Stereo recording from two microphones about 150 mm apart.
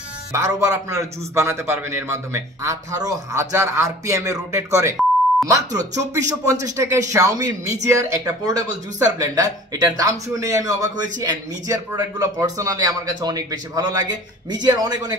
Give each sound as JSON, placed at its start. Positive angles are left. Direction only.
{"t": 0.3, "sound": "a man's voice", "side_deg": -25}